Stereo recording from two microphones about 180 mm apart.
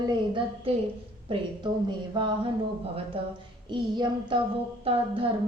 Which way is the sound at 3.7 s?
25° right (ahead or behind).